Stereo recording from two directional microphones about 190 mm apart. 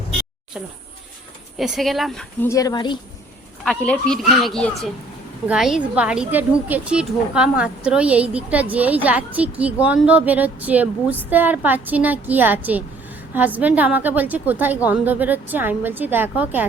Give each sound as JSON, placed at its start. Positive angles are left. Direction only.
{"t": 1.5, "sound": "a woman's voice", "side_deg": 0}
{"t": 2.4, "sound": "speech", "side_deg": 15}
{"t": 3.6, "sound": "a woman's voice", "side_deg": 5}